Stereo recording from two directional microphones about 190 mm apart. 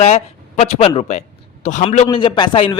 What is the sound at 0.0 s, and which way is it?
A man's voice, 35° left (ahead or behind).